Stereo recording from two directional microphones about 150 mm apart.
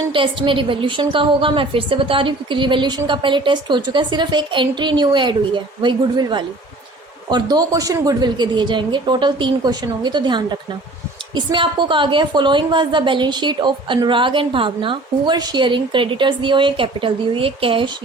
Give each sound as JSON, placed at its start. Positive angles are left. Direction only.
{"t": 0.1, "sound": "a woman's voice", "side_deg": -35}